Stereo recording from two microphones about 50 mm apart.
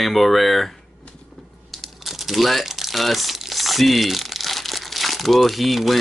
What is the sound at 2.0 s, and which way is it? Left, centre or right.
Crumpling, centre.